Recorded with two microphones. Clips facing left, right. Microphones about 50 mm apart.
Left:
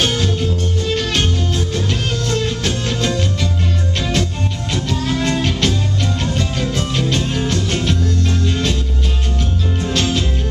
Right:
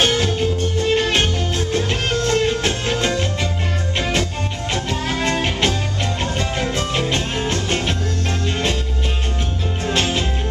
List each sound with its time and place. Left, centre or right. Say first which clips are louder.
0.0 s music: right 1 dB; right
9.8 s music: even; right